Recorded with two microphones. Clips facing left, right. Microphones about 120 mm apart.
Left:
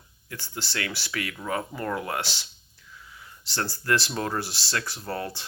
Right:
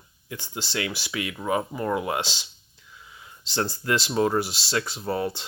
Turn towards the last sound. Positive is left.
turn(degrees=-15)  # may be behind; listen again after turning